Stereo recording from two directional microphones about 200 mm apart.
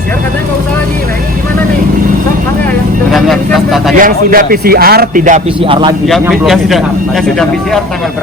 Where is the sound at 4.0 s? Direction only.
45° right (ahead or behind); by 5.9 s 25° right (ahead or behind).